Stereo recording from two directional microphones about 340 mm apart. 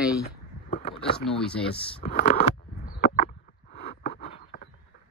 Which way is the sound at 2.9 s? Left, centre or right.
Left.